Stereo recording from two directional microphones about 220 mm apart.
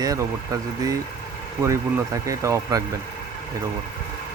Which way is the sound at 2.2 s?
15° right (ahead or behind).